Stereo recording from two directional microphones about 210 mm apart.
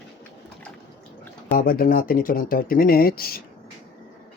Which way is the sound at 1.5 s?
45° left (ahead or behind).